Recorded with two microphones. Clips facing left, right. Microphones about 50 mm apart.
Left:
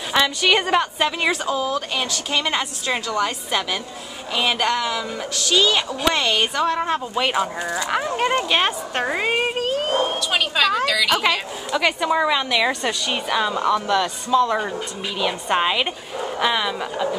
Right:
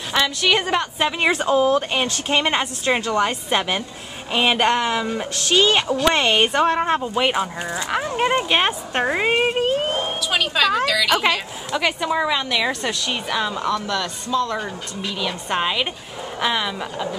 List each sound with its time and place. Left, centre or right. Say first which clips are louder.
0.1 s a woman's voice: left 1 dB; centre
1.3 s a woman's voice: right 5 dB; right
7.0 s speech: right 1 dB; centre
9.6 s a woman's voice: even; right
10.3 s a woman's voice: right 2 dB; centre